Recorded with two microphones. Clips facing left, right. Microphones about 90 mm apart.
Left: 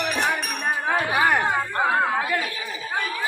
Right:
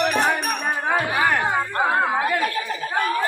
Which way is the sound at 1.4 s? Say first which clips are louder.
Right 1 dB; 10° right (ahead or behind).